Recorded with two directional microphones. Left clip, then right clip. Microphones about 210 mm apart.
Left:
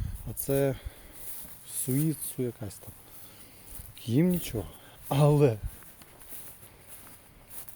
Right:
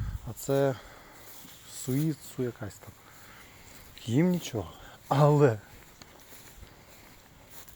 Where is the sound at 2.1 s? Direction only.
10° left (ahead or behind).